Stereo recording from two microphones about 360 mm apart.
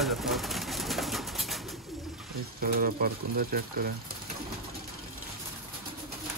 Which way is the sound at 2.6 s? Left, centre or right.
Right.